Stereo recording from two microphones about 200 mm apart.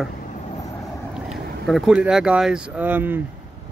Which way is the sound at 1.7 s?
Centre (ahead or behind).